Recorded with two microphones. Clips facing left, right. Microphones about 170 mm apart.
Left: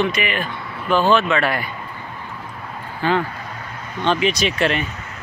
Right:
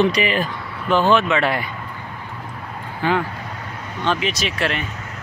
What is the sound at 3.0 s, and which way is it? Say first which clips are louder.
Speech: left 1 dB; 15° right (ahead or behind).